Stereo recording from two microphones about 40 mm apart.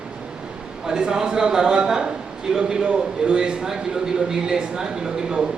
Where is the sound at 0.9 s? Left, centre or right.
Centre.